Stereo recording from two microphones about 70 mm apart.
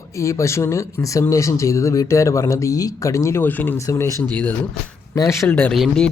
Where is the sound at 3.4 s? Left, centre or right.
Left.